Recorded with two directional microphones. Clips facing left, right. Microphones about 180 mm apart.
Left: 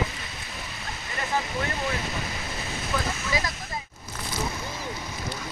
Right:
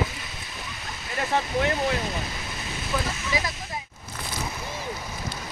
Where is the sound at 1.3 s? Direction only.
75° right (ahead or behind).